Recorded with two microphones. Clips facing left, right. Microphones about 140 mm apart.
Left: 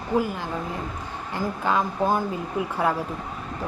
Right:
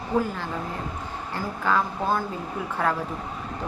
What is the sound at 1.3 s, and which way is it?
Speech, 15° left (ahead or behind).